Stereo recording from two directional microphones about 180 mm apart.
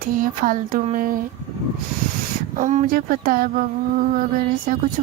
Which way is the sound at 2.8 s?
55° right (ahead or behind).